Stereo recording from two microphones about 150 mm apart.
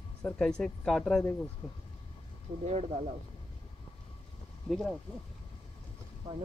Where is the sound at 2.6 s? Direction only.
50° right (ahead or behind).